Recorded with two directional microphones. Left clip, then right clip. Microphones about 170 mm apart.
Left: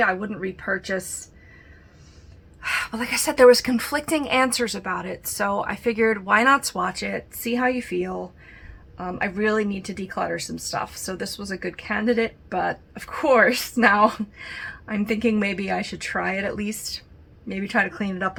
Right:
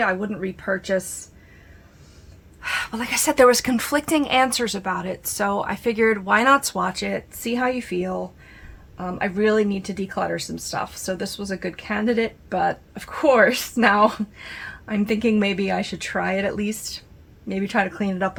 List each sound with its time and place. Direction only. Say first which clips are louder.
0.0 s speech: even; 20° right (ahead or behind)
2.6 s speech: even; 20° right (ahead or behind)